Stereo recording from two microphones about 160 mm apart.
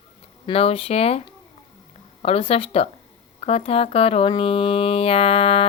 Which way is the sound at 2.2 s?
35° left (ahead or behind).